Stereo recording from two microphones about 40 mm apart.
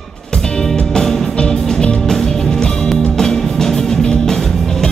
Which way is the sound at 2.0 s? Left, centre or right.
Centre.